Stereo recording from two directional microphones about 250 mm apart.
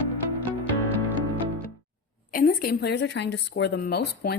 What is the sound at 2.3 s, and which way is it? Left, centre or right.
Speech, left.